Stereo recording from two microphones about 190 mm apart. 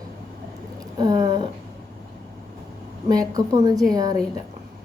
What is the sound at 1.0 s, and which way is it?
Speech, 20° right (ahead or behind).